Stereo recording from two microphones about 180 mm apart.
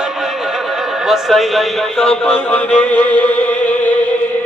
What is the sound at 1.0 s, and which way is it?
Speech, centre (ahead or behind).